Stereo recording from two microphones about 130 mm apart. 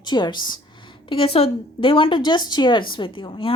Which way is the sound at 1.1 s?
45° left (ahead or behind).